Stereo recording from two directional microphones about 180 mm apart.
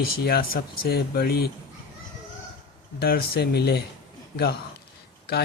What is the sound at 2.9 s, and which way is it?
Speech, 60° left (ahead or behind).